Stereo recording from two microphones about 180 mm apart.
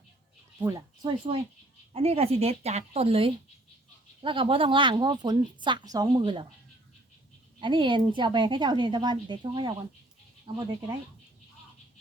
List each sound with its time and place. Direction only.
0.6 s speech: 15° right (ahead or behind)
1.9 s speech: 35° right (ahead or behind)
7.6 s speech: 25° right (ahead or behind)